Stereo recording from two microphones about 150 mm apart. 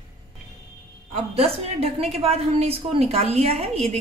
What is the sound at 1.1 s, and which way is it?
A woman's voice, 40° right (ahead or behind).